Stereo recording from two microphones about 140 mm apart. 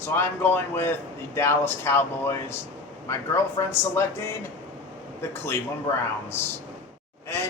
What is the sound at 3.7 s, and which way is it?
Speech, 20° left (ahead or behind).